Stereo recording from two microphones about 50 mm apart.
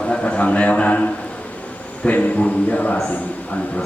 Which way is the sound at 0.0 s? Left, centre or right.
Left.